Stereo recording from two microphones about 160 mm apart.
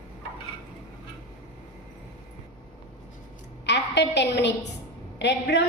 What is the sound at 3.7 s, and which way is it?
A woman's voice, 90° left.